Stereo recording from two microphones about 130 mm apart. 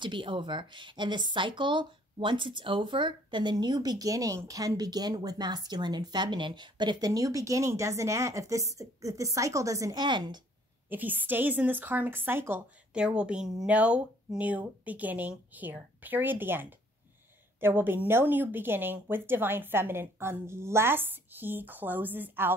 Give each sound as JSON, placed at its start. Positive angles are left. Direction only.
{"t": 0.0, "sound": "speech", "side_deg": -40}
{"t": 10.9, "sound": "speech", "side_deg": -15}